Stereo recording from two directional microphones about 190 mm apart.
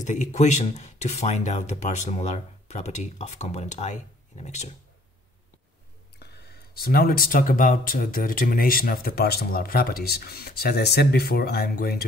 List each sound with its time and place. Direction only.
0.0 s speech: 40° left (ahead or behind)
6.1 s speech: 60° left (ahead or behind)